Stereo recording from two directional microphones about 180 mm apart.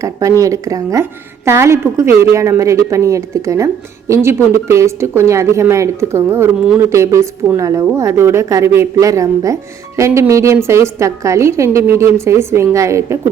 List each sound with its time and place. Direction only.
0.0 s a woman's voice: 15° right (ahead or behind)